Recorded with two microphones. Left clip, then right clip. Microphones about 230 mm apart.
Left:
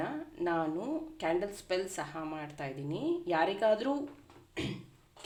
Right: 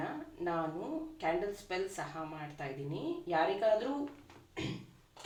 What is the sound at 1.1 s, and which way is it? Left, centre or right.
Speech, left.